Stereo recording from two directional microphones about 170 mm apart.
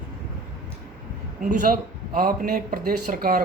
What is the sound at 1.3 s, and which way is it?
Speech, 50° right (ahead or behind).